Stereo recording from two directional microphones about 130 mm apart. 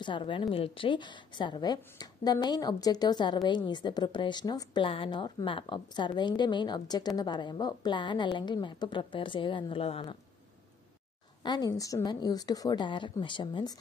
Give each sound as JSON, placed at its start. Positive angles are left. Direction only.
{"t": 0.0, "sound": "a woman's voice", "side_deg": 40}
{"t": 11.4, "sound": "a woman's voice", "side_deg": 30}